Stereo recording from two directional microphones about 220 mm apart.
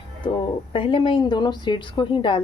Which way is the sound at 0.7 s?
25° left (ahead or behind).